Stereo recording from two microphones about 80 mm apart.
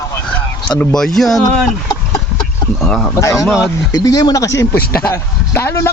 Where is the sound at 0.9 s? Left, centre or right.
Centre.